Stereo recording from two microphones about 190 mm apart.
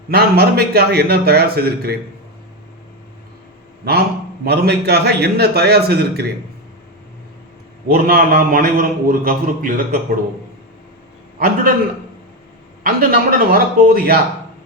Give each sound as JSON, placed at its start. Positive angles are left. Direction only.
{"t": 0.1, "sound": "a man's voice", "side_deg": -55}
{"t": 3.8, "sound": "a man's voice", "side_deg": -55}
{"t": 7.9, "sound": "a man's voice", "side_deg": -55}
{"t": 11.3, "sound": "a man's voice", "side_deg": -55}
{"t": 12.8, "sound": "a man's voice", "side_deg": -50}